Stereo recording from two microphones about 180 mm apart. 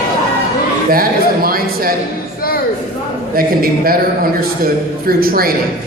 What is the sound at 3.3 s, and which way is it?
Speech, 55° right (ahead or behind).